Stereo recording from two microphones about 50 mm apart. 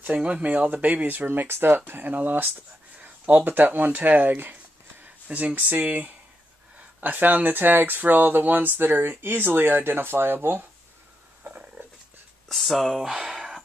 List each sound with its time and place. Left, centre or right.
0.2 s speech: right
11.8 s dog: right
12.4 s speech: centre